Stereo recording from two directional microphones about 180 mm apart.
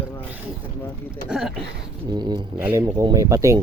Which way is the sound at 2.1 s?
25° right (ahead or behind).